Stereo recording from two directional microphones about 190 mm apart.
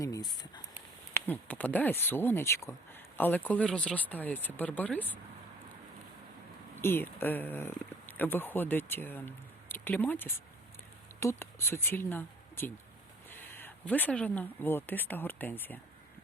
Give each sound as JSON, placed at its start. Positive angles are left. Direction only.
{"t": 0.0, "sound": "speech", "side_deg": 20}
{"t": 6.7, "sound": "speech", "side_deg": 10}